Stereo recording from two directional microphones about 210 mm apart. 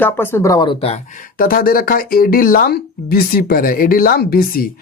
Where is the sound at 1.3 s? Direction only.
45° left (ahead or behind).